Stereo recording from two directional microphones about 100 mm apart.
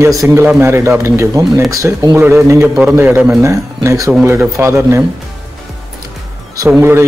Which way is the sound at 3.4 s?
30° right (ahead or behind).